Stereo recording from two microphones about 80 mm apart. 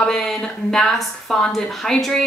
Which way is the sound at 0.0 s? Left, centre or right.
Centre.